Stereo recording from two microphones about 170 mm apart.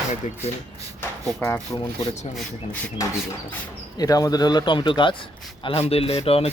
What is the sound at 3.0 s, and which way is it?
Speech, 20° left (ahead or behind).